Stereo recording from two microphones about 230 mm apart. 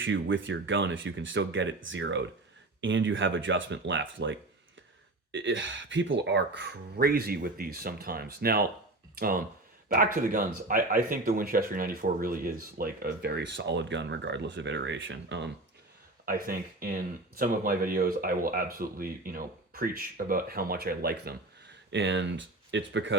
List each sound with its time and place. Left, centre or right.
0.0 s speech: right
16.2 s speech: right